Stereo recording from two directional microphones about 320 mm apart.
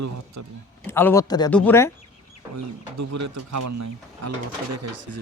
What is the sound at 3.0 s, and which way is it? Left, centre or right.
Speech, right.